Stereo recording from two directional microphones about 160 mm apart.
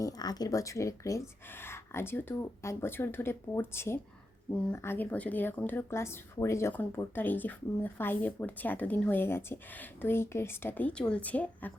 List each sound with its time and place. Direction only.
0.0 s speech: 25° left (ahead or behind)